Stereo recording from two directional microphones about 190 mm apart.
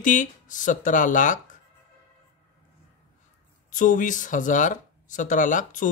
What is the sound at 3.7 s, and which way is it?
Speech, 40° left (ahead or behind).